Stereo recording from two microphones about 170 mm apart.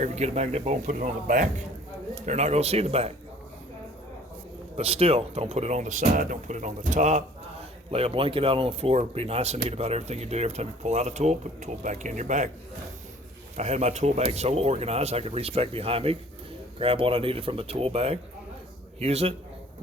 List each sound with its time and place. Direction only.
0.0 s speech: 40° right (ahead or behind)
4.8 s speech: 35° right (ahead or behind)
13.6 s speech: 40° right (ahead or behind)